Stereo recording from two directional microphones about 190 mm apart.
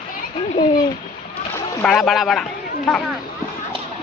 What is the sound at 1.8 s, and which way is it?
Speech, 5° left (ahead or behind).